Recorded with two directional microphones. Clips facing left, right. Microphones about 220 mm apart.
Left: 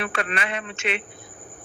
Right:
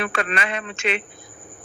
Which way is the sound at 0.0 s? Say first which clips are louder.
Right 3 dB; 90° right.